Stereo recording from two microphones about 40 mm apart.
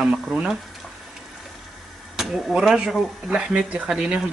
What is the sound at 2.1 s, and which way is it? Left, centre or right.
Speech, centre.